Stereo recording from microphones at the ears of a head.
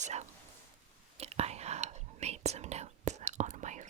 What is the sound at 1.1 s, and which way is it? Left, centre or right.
Whispering, right.